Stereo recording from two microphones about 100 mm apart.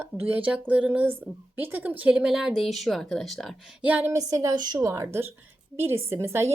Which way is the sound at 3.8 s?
15° right (ahead or behind).